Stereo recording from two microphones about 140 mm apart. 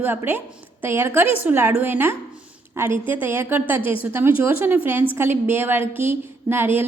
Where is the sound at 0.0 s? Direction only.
15° right (ahead or behind).